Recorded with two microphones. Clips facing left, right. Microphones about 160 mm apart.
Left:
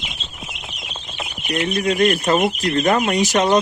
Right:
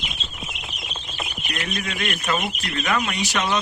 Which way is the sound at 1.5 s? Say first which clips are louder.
Left 11 dB; 30° left (ahead or behind).